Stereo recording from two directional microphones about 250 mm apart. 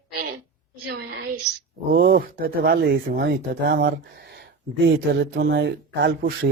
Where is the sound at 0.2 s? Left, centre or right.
Right.